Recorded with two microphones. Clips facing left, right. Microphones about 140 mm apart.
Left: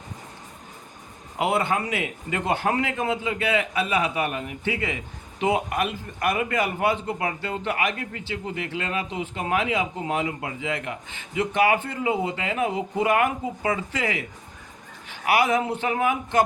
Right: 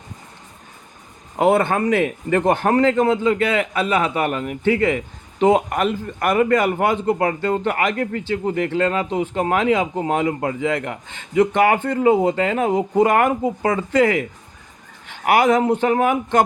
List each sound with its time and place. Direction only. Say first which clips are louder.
1.4 s a man's voice: right 7 dB; 55° right (ahead or behind)